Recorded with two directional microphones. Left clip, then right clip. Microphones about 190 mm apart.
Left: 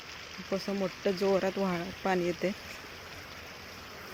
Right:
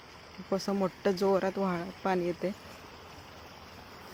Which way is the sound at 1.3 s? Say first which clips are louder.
Even; 5° right (ahead or behind).